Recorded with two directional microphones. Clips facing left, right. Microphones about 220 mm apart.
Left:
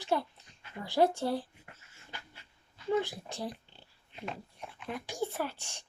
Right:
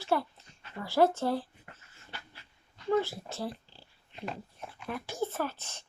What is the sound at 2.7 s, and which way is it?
Speech, 10° left (ahead or behind).